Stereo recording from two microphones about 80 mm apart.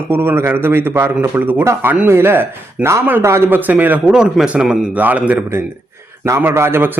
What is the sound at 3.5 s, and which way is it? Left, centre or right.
A man's voice, right.